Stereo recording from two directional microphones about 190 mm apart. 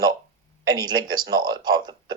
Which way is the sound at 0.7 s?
20° right (ahead or behind).